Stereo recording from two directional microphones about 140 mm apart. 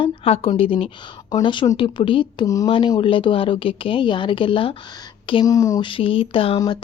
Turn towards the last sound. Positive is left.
turn(degrees=40)  # may be behind; listen again after turning